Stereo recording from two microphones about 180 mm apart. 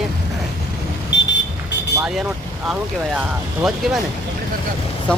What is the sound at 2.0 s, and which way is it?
Speech, 5° right (ahead or behind).